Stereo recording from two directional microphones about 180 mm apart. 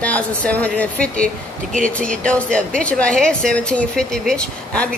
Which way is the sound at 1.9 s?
5° left (ahead or behind).